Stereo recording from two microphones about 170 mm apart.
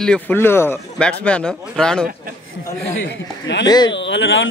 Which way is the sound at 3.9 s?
90° left.